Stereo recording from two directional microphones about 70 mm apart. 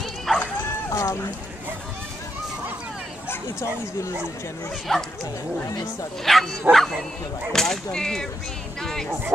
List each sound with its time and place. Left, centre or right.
0.3 s run: centre
0.8 s a sound: left
4.9 s speech: centre
6.2 s speech: centre